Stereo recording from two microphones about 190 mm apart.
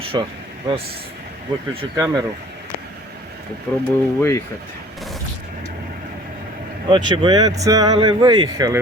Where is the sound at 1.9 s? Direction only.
20° right (ahead or behind).